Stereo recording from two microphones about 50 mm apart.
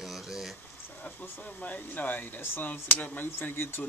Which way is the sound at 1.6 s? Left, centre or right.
Left.